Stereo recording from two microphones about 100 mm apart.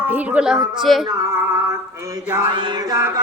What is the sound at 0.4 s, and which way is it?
Speech, 5° right (ahead or behind).